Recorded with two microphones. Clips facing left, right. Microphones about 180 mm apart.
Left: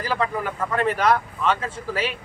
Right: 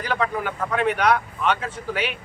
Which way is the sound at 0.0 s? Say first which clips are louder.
Even; centre (ahead or behind).